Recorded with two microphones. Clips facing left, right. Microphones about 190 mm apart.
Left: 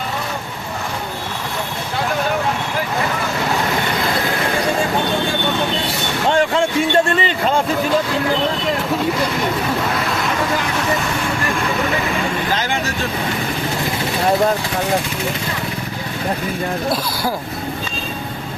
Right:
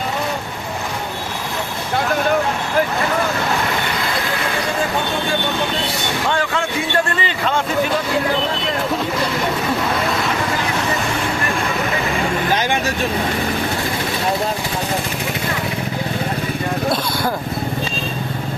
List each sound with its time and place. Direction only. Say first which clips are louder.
6.2 s music: left 7 dB; 30° left (ahead or behind)